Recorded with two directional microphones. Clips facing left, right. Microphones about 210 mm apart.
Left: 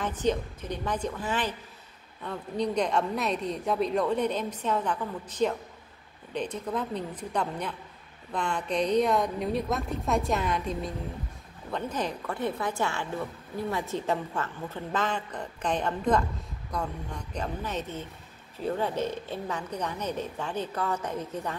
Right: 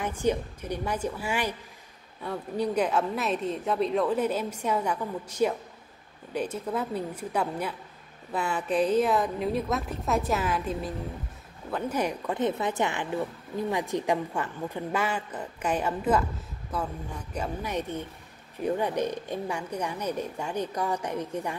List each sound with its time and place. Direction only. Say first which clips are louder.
0.0 s a woman's voice: right 1 dB; 10° right (ahead or behind)